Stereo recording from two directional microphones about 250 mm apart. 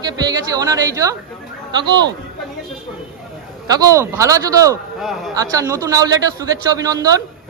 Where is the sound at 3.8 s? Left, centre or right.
Centre.